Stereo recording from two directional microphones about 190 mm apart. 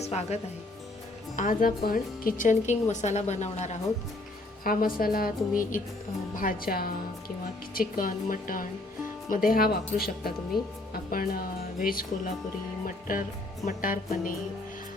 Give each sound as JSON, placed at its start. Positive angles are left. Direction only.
{"t": 0.0, "sound": "a woman's voice", "side_deg": 35}
{"t": 1.4, "sound": "a woman's voice", "side_deg": 45}
{"t": 4.6, "sound": "speech", "side_deg": 50}